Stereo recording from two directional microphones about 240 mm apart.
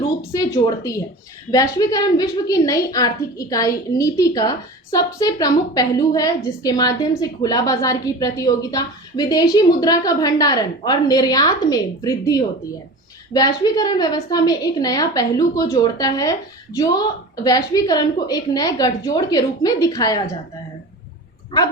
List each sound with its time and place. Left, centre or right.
0.3 s a woman's voice: centre